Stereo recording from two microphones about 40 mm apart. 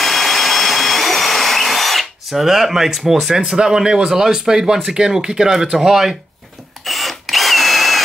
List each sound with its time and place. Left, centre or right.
0.0 s vacuum cleaner: centre
2.4 s speech: centre
6.8 s drill: centre